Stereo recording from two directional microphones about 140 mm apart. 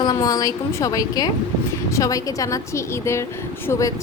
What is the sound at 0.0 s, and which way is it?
Speech, 30° left (ahead or behind).